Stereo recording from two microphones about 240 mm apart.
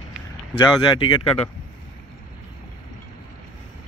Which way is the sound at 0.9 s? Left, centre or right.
Left.